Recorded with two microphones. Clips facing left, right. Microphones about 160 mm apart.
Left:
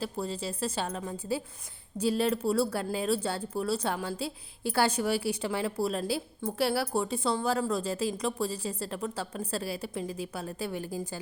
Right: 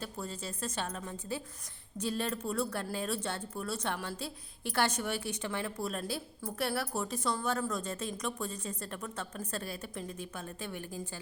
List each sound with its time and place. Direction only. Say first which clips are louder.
0.0 s a woman's voice: left 7 dB; 30° left (ahead or behind)
2.4 s a woman's voice: left 7 dB; 30° left (ahead or behind)